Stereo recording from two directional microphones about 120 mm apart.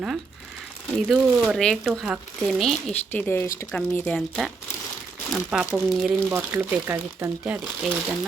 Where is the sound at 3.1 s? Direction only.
15° left (ahead or behind).